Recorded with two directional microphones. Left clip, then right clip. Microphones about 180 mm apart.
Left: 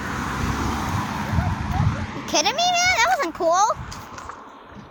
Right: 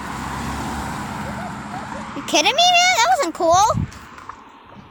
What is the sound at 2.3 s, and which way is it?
A child's voice, 45° right (ahead or behind).